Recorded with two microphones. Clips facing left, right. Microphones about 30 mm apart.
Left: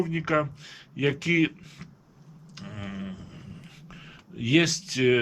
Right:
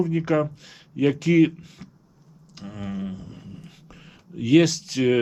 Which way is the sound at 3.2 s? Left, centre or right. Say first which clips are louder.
Right 4 dB; centre.